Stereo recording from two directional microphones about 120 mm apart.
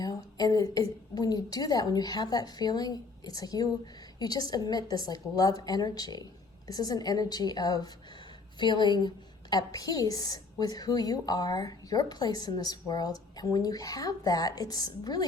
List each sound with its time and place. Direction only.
0.0 s a woman's voice: 30° left (ahead or behind)